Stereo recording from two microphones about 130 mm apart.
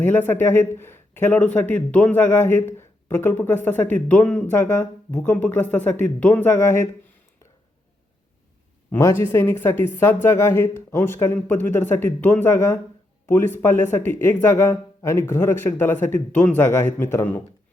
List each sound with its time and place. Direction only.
0.0 s speech: 15° left (ahead or behind)
8.9 s speech: 20° left (ahead or behind)